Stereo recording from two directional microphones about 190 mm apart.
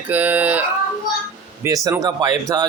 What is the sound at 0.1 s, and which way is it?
Speech, 10° right (ahead or behind).